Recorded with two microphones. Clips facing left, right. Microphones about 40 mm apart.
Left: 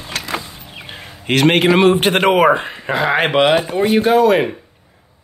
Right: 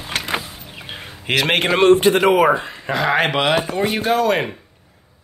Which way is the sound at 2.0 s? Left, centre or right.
Left.